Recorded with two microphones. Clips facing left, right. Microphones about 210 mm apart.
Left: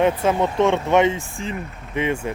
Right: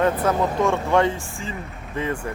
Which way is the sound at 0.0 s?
20° left (ahead or behind).